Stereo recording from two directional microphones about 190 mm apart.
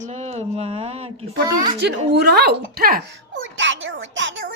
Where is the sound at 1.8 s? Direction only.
60° right (ahead or behind).